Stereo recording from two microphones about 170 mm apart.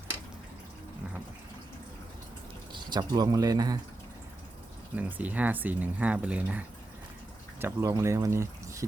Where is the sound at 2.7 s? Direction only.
25° right (ahead or behind).